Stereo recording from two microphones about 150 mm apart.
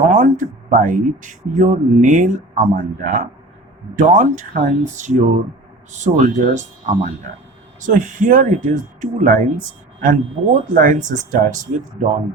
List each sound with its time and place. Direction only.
0.1 s speech: 60° right (ahead or behind)